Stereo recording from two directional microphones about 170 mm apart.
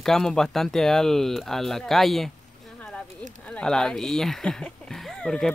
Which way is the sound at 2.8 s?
5° left (ahead or behind).